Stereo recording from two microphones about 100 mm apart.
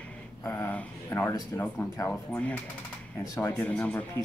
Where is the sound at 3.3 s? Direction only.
25° left (ahead or behind).